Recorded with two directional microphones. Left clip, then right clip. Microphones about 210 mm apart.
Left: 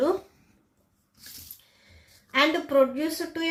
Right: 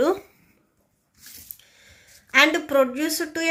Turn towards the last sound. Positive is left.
turn(degrees=-35)  # may be behind; listen again after turning